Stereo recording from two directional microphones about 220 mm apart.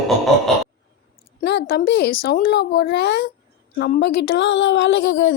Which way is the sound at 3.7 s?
45° left (ahead or behind).